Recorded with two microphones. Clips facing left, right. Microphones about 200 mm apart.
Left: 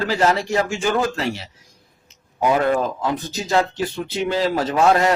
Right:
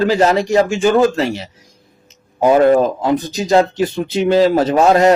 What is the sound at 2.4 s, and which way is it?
Speech, 35° right (ahead or behind).